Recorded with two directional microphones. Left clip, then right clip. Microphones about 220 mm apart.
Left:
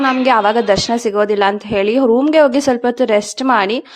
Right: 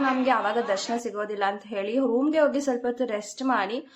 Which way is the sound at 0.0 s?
45° left (ahead or behind).